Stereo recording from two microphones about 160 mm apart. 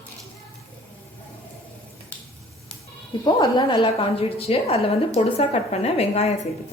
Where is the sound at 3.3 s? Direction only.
25° left (ahead or behind).